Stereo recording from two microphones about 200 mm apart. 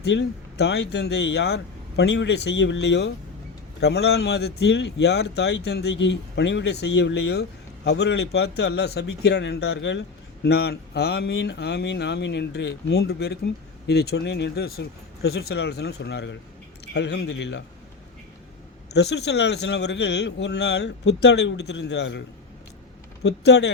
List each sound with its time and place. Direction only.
0.0 s a man's voice: 55° left (ahead or behind)
18.9 s a man's voice: 55° left (ahead or behind)
23.2 s a man's voice: 55° left (ahead or behind)